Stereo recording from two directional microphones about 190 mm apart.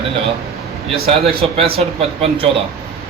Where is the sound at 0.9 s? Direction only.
30° right (ahead or behind).